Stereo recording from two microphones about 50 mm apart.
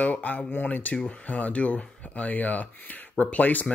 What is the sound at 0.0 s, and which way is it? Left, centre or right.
Speech, left.